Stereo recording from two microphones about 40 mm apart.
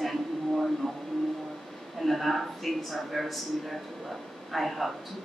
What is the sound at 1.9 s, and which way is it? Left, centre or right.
A woman's voice, centre.